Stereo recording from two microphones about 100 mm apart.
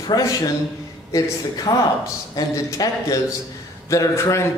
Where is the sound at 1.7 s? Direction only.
50° left (ahead or behind).